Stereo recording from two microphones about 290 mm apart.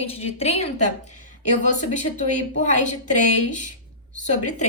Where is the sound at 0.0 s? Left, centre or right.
Left.